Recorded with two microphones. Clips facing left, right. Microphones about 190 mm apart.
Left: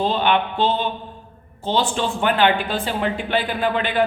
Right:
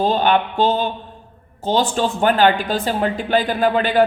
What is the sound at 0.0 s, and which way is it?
Speech, 45° right (ahead or behind).